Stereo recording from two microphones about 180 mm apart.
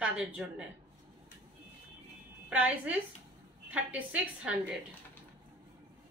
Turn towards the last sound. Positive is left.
turn(degrees=-5)  # may be behind; listen again after turning